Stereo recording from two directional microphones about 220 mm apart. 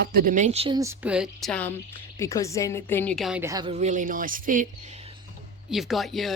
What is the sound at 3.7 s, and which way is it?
Speech, 35° right (ahead or behind).